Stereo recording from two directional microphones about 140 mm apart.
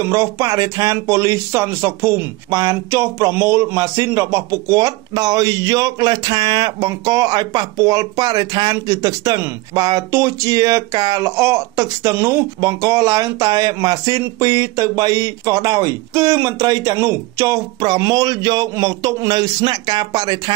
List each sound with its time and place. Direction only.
0.0 s speech: 20° right (ahead or behind)